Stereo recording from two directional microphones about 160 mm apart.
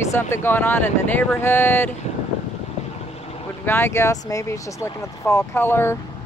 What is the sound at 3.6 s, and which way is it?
Speech, 15° left (ahead or behind).